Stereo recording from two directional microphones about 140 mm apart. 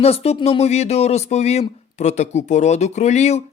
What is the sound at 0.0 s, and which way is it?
Speech, 45° left (ahead or behind).